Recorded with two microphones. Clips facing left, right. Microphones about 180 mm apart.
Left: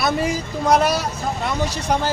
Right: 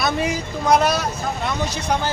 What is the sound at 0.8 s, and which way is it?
Speech, 5° left (ahead or behind).